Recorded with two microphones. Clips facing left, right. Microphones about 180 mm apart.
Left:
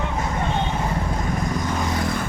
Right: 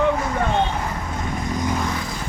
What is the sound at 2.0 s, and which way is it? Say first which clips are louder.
Vehicle: left 5 dB; 60° left (ahead or behind).